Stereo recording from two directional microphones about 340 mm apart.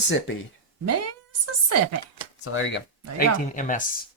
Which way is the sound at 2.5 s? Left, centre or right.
Left.